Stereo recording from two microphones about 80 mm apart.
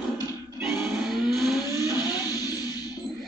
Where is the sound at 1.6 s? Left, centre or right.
Left.